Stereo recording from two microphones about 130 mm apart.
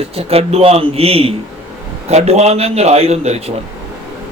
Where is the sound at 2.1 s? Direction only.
60° right (ahead or behind).